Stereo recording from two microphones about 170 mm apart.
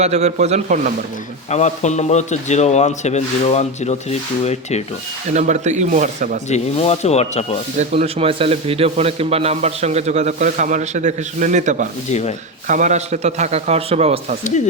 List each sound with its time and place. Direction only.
0.0 s a man's voice: 40° right (ahead or behind)
1.5 s speech: 40° left (ahead or behind)
5.3 s speech: 45° right (ahead or behind)
6.5 s speech: 40° left (ahead or behind)
7.8 s a man's voice: 35° right (ahead or behind)